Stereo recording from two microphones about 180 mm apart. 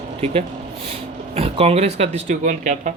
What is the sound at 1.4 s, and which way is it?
Speech, 35° right (ahead or behind).